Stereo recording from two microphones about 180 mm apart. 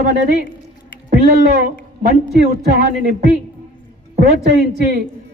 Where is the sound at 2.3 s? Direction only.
65° right (ahead or behind).